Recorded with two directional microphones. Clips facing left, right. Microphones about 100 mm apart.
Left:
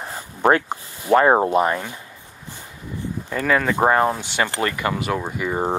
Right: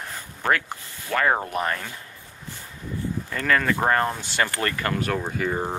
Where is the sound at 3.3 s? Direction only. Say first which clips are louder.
Left 3 dB; 10° left (ahead or behind).